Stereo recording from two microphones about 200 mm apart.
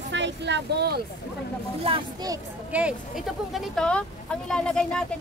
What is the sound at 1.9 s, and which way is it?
Speech, 30° right (ahead or behind).